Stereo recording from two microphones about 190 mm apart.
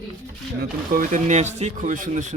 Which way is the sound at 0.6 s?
45° right (ahead or behind).